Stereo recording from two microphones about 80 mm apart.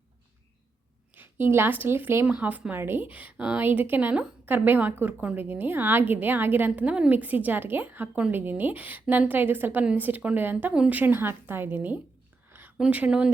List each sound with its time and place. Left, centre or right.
1.1 s speech: right
2.2 s a woman's voice: centre
6.7 s a woman's voice: centre
12.5 s a sound: right
12.9 s speech: centre